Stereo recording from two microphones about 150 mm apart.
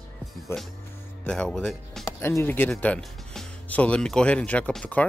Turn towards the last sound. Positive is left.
turn(degrees=10)  # may be behind; listen again after turning